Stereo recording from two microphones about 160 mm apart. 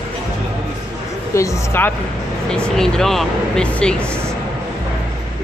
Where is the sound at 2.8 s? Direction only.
5° left (ahead or behind).